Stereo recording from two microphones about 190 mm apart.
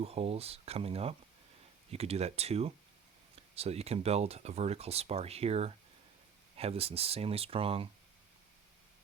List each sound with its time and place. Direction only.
0.0 s speech: 30° right (ahead or behind)